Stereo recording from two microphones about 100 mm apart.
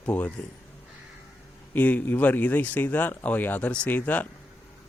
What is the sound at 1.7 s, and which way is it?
Speech, 15° left (ahead or behind).